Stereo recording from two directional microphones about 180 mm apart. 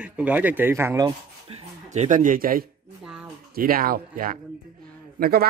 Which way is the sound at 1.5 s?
30° right (ahead or behind).